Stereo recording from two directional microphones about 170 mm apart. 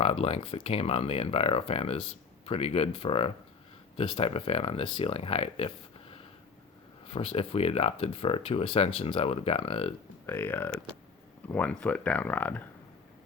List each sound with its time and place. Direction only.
0.0 s speech: 35° left (ahead or behind)
10.2 s speech: 15° left (ahead or behind)